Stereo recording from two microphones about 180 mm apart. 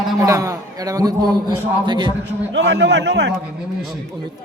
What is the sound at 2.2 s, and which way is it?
A man's voice, 75° right (ahead or behind).